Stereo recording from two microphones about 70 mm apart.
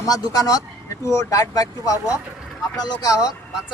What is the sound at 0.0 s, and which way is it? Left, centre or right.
Speech, left.